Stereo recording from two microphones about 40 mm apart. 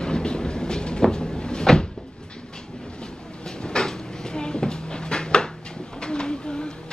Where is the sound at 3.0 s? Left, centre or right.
Left.